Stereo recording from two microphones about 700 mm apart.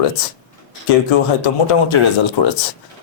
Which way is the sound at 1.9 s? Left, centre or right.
Left.